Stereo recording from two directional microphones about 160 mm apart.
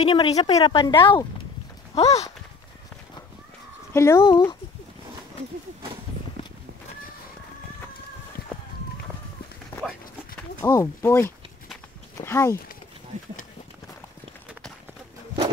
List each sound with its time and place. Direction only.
0.1 s a woman's voice: 30° left (ahead or behind)
3.9 s speech: 20° left (ahead or behind)
10.6 s speech: 20° left (ahead or behind)